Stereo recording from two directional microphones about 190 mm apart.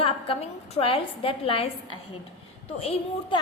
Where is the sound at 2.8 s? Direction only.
30° left (ahead or behind).